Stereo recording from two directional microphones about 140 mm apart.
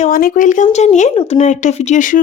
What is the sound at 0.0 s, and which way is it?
Speech, 90° left.